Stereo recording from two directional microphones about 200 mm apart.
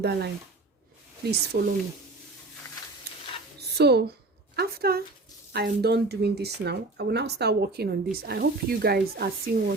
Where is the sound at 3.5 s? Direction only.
55° right (ahead or behind).